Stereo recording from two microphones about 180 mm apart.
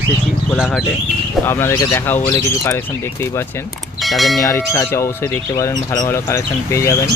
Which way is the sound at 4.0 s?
Centre (ahead or behind).